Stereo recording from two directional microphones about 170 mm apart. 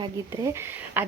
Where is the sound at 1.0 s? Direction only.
10° right (ahead or behind).